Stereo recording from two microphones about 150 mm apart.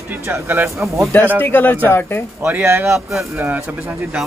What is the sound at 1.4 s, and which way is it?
Speech, 10° left (ahead or behind).